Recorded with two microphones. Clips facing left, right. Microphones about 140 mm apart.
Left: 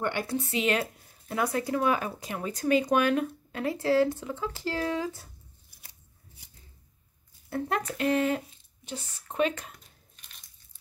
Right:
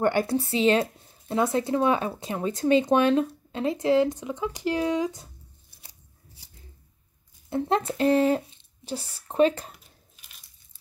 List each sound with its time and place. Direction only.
0.0 s speech: 40° right (ahead or behind); by 5.3 s 20° right (ahead or behind)
7.4 s speech: 25° right (ahead or behind)
10.1 s a sound: 5° right (ahead or behind)